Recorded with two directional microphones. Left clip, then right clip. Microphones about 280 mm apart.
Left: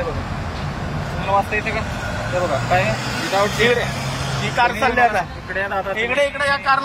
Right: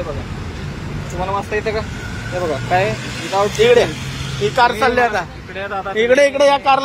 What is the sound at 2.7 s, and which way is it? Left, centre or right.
Speech, centre.